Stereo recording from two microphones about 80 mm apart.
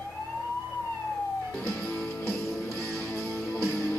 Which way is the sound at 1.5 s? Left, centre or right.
Centre.